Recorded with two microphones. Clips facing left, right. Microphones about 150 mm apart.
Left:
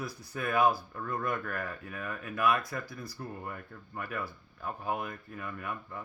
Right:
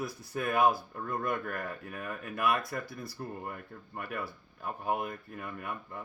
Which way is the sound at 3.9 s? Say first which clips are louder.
Even; 50° right (ahead or behind).